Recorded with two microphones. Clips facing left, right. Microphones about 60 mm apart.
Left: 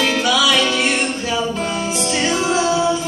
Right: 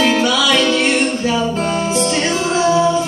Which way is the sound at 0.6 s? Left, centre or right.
Centre.